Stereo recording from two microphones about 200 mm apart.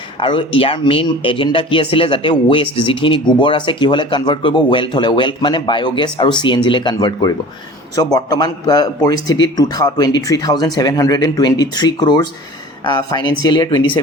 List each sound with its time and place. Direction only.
0.2 s speech: 25° left (ahead or behind)